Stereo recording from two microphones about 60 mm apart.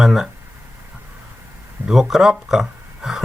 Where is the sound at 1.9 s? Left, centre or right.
Centre.